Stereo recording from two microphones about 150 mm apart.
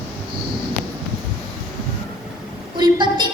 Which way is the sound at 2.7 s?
30° right (ahead or behind).